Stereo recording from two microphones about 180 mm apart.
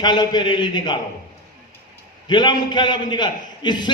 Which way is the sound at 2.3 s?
25° left (ahead or behind).